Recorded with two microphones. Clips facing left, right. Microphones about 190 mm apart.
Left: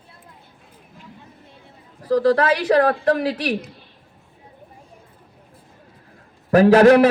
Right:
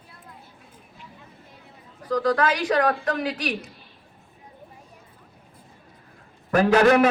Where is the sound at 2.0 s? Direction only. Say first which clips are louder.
Left 5 dB; 30° left (ahead or behind).